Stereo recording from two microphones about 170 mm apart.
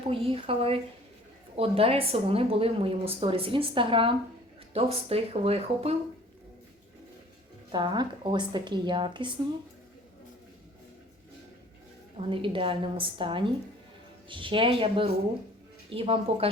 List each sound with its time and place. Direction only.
0.1 s speech: 30° right (ahead or behind)
7.7 s a woman's voice: 25° right (ahead or behind)
12.3 s a woman's voice: 30° right (ahead or behind)